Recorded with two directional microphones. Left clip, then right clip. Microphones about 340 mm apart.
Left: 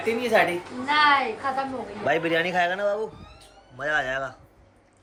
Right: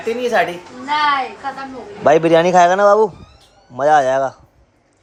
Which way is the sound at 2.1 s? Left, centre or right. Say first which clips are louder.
Right 12 dB; centre.